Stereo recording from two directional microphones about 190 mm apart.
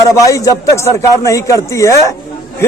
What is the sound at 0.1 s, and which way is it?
A man's voice, 15° left (ahead or behind).